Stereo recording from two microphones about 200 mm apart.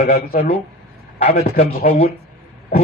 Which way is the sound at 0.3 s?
30° left (ahead or behind).